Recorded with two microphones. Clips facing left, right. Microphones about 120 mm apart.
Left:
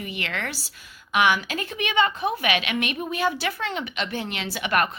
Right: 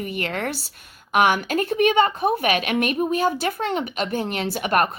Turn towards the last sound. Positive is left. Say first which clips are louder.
# right 3 dB
turn(degrees=-40)  # may be behind; listen again after turning